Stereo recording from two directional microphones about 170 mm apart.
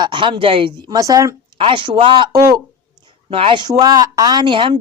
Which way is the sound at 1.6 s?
30° right (ahead or behind).